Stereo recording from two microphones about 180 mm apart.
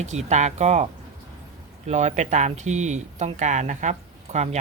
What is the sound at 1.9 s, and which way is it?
Speech, 40° right (ahead or behind).